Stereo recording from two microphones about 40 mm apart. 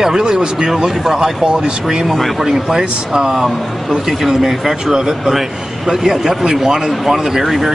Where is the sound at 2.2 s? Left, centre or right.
Centre.